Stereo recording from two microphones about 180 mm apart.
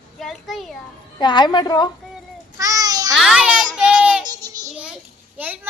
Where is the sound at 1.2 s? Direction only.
25° left (ahead or behind).